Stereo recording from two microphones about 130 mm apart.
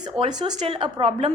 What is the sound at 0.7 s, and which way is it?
Speech, 45° right (ahead or behind).